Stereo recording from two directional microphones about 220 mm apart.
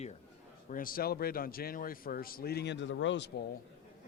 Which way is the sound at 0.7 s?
40° left (ahead or behind).